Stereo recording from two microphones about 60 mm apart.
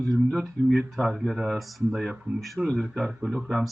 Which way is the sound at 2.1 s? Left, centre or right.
Centre.